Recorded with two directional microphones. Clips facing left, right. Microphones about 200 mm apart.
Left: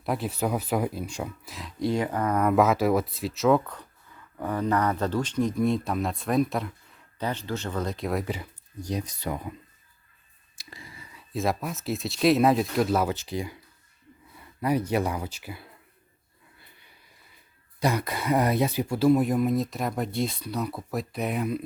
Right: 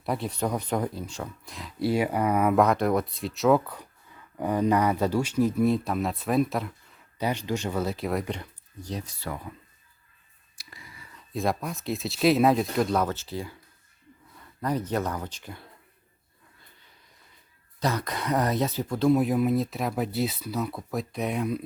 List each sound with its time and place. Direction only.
0.0 s speech: centre (ahead or behind)
1.5 s speech: centre (ahead or behind)
7.2 s speech: 15° right (ahead or behind)
8.3 s speech: 10° left (ahead or behind)
10.6 s whispering: 25° left (ahead or behind)
11.1 s speech: 5° left (ahead or behind)
17.7 s speech: 10° left (ahead or behind)